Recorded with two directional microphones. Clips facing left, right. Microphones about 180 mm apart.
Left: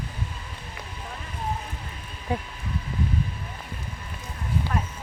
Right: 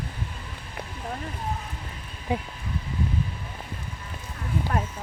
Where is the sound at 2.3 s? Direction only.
10° right (ahead or behind).